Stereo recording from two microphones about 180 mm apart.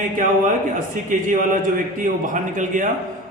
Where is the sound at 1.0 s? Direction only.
50° right (ahead or behind).